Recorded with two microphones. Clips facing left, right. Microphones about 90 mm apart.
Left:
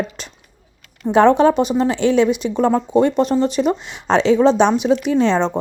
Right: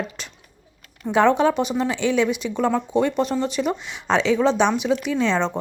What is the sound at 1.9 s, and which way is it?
Speech, 45° left (ahead or behind).